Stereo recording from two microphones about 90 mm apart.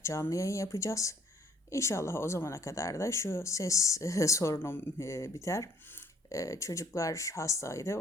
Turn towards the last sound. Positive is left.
turn(degrees=35)  # may be behind; listen again after turning